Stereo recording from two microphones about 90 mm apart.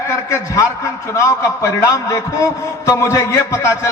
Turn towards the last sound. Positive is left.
turn(degrees=35)  # may be behind; listen again after turning